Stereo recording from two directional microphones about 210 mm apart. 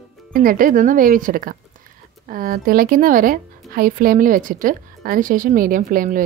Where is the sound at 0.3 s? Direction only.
40° right (ahead or behind).